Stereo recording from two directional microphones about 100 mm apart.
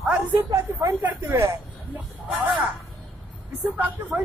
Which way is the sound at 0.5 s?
35° right (ahead or behind).